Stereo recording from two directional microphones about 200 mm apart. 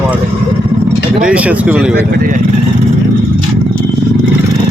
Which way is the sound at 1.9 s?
45° right (ahead or behind).